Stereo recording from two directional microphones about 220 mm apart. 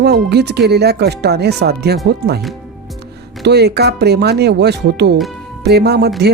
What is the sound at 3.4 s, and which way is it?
Speech, 50° right (ahead or behind).